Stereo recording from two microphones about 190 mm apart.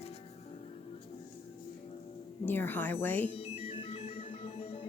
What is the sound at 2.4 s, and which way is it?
Speech, 10° left (ahead or behind).